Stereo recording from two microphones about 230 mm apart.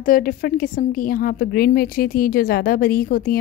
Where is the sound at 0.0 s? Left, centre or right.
Left.